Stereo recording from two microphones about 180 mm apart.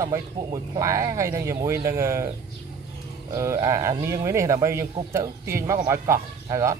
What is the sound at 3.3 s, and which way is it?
Speech, 15° right (ahead or behind).